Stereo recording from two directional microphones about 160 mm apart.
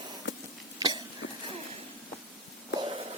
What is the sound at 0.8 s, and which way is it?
Cough, 25° right (ahead or behind).